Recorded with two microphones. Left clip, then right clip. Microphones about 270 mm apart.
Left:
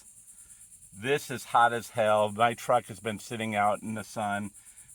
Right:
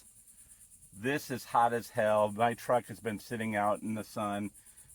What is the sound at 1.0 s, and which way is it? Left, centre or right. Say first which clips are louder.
Speech: left 5 dB; left.